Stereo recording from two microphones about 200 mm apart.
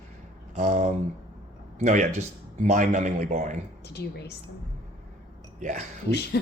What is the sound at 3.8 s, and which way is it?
Speech, 55° left (ahead or behind).